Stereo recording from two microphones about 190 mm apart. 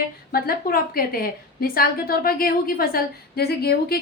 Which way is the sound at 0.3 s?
50° left (ahead or behind).